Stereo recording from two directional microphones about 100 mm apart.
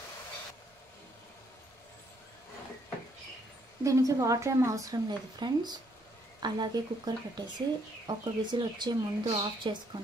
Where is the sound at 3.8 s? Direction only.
35° right (ahead or behind).